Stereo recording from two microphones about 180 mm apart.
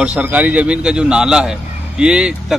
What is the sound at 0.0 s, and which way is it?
A man's voice, 10° right (ahead or behind).